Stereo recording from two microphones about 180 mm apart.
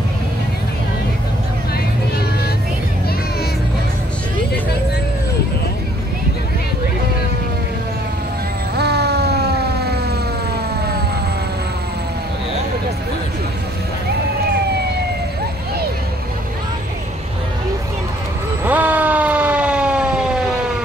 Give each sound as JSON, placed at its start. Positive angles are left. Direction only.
{"t": 8.7, "sound": "siren", "side_deg": -65}
{"t": 18.6, "sound": "siren", "side_deg": -10}